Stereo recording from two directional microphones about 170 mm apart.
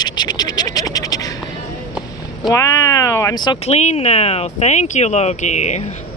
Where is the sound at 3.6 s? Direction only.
40° left (ahead or behind).